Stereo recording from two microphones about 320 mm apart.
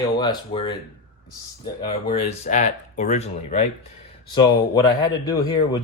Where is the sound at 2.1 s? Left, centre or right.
Centre.